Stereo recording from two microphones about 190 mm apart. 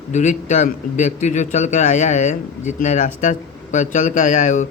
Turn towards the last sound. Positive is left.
turn(degrees=40)  # may be behind; listen again after turning